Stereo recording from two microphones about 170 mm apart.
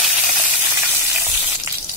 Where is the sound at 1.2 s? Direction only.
20° right (ahead or behind).